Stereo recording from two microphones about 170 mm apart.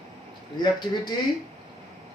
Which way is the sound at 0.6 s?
25° left (ahead or behind).